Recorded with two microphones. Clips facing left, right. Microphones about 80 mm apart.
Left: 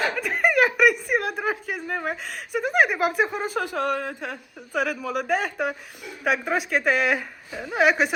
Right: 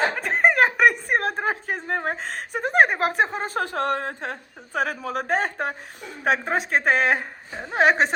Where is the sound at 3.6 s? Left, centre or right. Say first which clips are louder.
Right 2 dB; right.